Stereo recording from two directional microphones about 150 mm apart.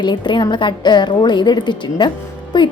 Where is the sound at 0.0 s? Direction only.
30° left (ahead or behind).